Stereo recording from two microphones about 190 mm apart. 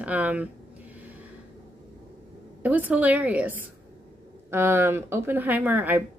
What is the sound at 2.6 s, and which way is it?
A woman's voice, 10° right (ahead or behind).